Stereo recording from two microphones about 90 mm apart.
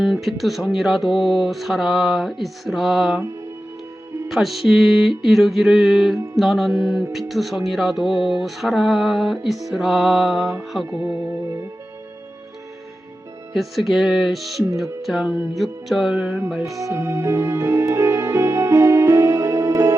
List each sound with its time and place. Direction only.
0.0 s music: centre (ahead or behind)
4.3 s music: centre (ahead or behind)
13.5 s music: centre (ahead or behind)
16.7 s music: 35° right (ahead or behind)